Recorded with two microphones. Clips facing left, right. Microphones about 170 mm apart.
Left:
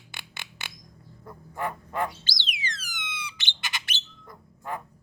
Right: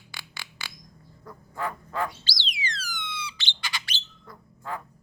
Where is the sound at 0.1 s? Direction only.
25° left (ahead or behind).